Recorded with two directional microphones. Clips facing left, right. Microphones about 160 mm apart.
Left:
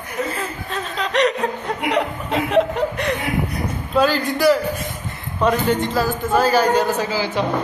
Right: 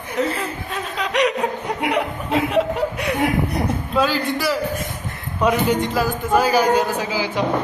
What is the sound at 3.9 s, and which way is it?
A man's voice, centre (ahead or behind).